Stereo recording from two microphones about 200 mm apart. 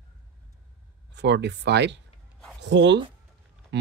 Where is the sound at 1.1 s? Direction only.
60° right (ahead or behind).